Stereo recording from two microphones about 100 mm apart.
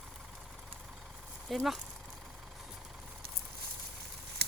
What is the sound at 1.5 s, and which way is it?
Speech, centre (ahead or behind).